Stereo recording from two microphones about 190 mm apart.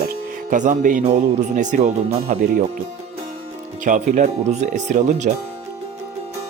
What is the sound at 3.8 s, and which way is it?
Speech, 40° right (ahead or behind).